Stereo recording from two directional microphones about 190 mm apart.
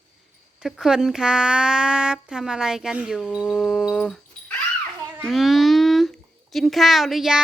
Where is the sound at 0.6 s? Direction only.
5° right (ahead or behind).